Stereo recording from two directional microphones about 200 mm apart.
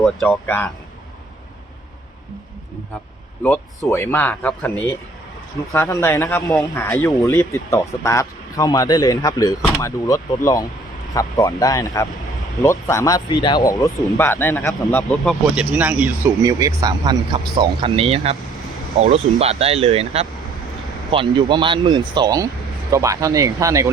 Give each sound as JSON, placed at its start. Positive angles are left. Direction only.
{"t": 0.0, "sound": "speech", "side_deg": 5}
{"t": 3.5, "sound": "speech", "side_deg": 15}